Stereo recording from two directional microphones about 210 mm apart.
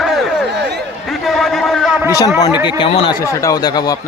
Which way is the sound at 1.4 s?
Centre (ahead or behind).